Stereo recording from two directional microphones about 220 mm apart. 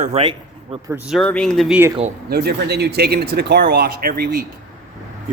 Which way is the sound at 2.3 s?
45° right (ahead or behind).